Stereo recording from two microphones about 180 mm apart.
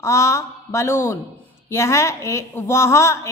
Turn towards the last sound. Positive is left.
turn(degrees=15)  # may be behind; listen again after turning